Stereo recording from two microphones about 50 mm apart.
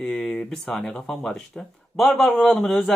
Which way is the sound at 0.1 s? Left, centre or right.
Left.